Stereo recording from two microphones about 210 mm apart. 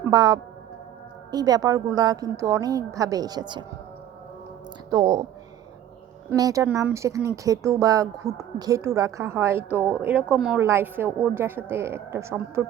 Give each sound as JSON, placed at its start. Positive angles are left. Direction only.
{"t": 0.0, "sound": "speech", "side_deg": -20}
{"t": 4.9, "sound": "speech", "side_deg": -20}
{"t": 6.3, "sound": "speech", "side_deg": -15}